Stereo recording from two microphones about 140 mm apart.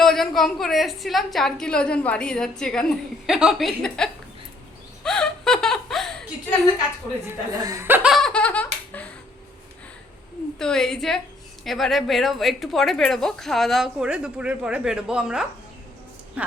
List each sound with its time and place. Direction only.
0.0 s a woman's voice: centre (ahead or behind)
5.0 s laughter: 5° left (ahead or behind)
7.3 s speech: 25° right (ahead or behind)
8.1 s laughter: 5° left (ahead or behind)
10.6 s a woman's voice: 5° left (ahead or behind)